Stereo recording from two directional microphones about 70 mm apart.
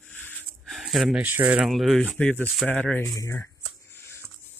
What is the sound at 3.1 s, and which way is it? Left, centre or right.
Speech, left.